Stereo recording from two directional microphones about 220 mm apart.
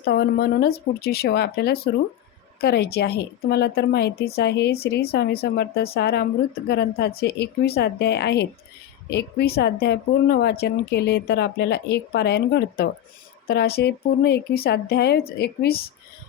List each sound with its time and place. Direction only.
0.0 s speech: 50° left (ahead or behind)